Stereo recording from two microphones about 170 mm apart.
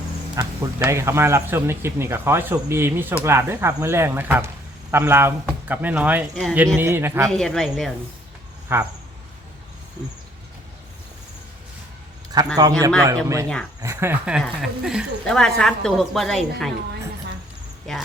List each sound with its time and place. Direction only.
0.3 s speech: 15° right (ahead or behind)
7.3 s speech: 5° left (ahead or behind)
8.7 s speech: 10° right (ahead or behind)
12.3 s a man's voice: 20° right (ahead or behind); by 16.7 s centre (ahead or behind)